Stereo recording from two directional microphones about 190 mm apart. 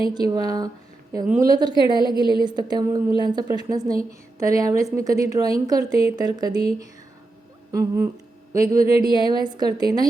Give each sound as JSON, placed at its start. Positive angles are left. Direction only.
{"t": 0.1, "sound": "a woman's voice", "side_deg": -20}
{"t": 7.7, "sound": "a woman's voice", "side_deg": -15}